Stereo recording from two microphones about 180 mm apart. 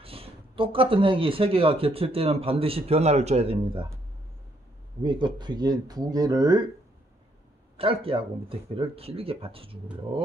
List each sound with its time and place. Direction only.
0.0 s speech: 30° right (ahead or behind)
5.0 s speech: 25° right (ahead or behind)
7.7 s speech: 30° right (ahead or behind)